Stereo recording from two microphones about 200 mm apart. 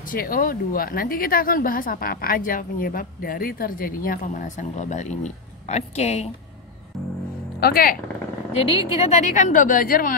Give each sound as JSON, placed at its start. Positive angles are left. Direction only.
{"t": 0.0, "sound": "a woman's voice", "side_deg": 45}
{"t": 7.6, "sound": "a woman's voice", "side_deg": 45}
{"t": 8.8, "sound": "a woman's voice", "side_deg": 30}